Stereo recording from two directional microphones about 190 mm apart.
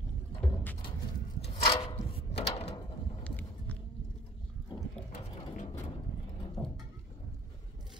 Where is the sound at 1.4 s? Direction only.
25° left (ahead or behind).